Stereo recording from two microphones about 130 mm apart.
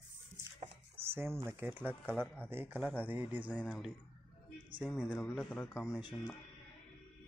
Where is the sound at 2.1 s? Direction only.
10° left (ahead or behind).